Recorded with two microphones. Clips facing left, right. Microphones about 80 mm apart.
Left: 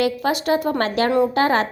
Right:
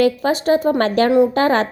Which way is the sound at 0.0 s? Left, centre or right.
Right.